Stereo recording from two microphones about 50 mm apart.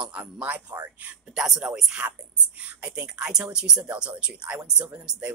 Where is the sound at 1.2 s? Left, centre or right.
Centre.